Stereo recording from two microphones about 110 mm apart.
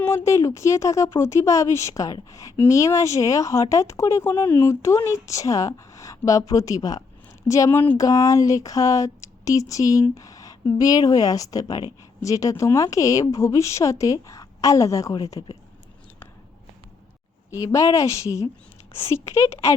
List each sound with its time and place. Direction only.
0.0 s speech: 20° left (ahead or behind)
17.5 s speech: 30° left (ahead or behind)